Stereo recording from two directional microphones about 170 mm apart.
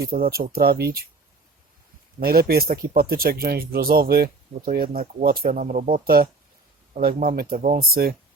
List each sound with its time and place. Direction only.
0.0 s speech: 60° right (ahead or behind)
2.1 s speech: 60° right (ahead or behind)